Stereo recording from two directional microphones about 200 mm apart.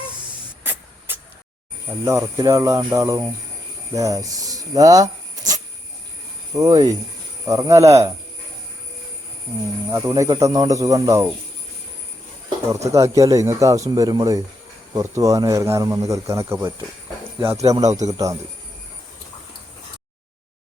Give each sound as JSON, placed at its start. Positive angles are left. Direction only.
{"t": 0.6, "sound": "spray", "side_deg": -10}
{"t": 2.0, "sound": "speech", "side_deg": -15}
{"t": 6.6, "sound": "speech", "side_deg": -15}
{"t": 9.9, "sound": "speech", "side_deg": -15}
{"t": 12.8, "sound": "speech", "side_deg": -15}